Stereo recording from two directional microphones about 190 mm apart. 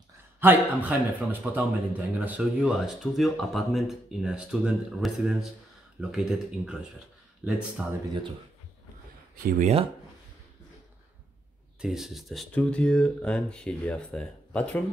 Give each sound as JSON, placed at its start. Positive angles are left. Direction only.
{"t": 0.4, "sound": "a man's voice", "side_deg": -10}
{"t": 9.6, "sound": "speech", "side_deg": -35}
{"t": 11.8, "sound": "a man's voice", "side_deg": 0}